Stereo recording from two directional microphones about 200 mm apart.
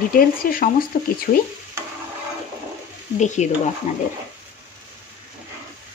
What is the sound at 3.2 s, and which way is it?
Speech, 35° left (ahead or behind).